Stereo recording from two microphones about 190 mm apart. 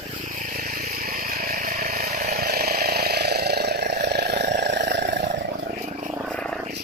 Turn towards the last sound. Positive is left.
turn(degrees=-60)  # may be behind; listen again after turning